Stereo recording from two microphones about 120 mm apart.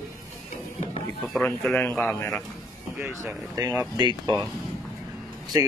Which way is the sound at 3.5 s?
30° right (ahead or behind).